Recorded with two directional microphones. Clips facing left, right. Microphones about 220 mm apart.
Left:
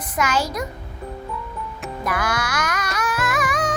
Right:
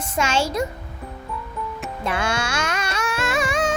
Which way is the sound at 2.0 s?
25° right (ahead or behind).